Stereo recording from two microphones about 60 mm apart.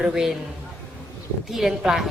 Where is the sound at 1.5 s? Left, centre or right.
Centre.